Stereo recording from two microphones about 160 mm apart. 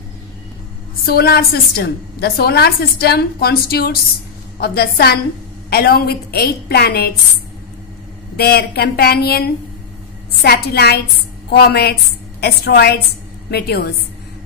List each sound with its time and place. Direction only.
1.0 s a woman's voice: 75° left (ahead or behind)
8.4 s a woman's voice: 80° left
10.4 s a woman's voice: 80° left